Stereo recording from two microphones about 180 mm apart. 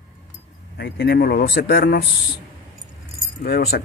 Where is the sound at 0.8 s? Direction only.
60° left (ahead or behind).